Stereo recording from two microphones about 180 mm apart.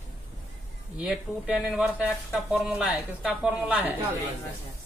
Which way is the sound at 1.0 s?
5° right (ahead or behind).